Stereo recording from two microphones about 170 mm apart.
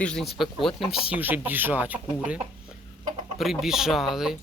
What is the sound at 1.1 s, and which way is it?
Speech, 10° right (ahead or behind).